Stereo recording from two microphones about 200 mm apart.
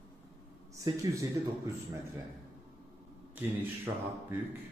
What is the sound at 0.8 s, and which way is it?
Speech, 15° right (ahead or behind).